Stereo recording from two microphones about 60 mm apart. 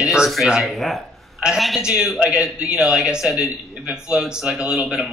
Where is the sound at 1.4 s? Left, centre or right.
Centre.